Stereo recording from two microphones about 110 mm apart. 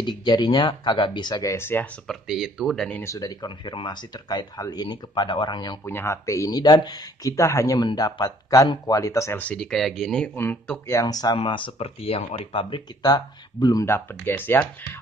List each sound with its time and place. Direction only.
0.0 s speech: 40° left (ahead or behind); by 1.9 s 20° left (ahead or behind)
2.0 s speech: 5° right (ahead or behind)
3.0 s speech: 30° left (ahead or behind)
5.9 s speech: 25° left (ahead or behind)
9.4 s speech: 10° left (ahead or behind)
10.3 s speech: 20° left (ahead or behind)
10.9 s speech: 35° left (ahead or behind)
11.3 s speech: 50° left (ahead or behind)
13.0 s speech: 35° left (ahead or behind)
13.8 s speech: 20° left (ahead or behind)